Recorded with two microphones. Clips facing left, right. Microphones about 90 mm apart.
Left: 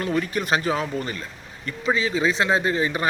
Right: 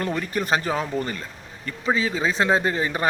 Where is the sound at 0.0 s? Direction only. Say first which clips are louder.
Left 1 dB; 40° right (ahead or behind).